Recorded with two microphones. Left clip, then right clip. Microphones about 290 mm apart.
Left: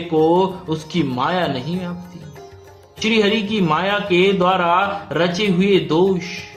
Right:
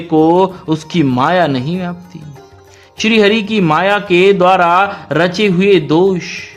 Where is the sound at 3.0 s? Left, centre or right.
Right.